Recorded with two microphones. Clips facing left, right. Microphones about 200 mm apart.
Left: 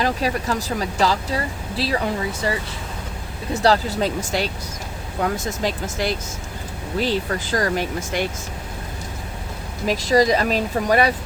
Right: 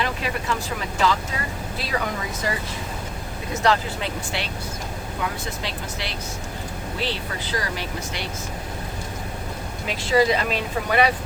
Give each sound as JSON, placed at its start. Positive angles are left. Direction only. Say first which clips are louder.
{"t": 0.0, "sound": "speech", "louder": "left 5 dB", "side_deg": 40}
{"t": 3.5, "sound": "speech", "louder": "left 4 dB", "side_deg": 35}
{"t": 9.8, "sound": "speech", "louder": "left 3 dB", "side_deg": 40}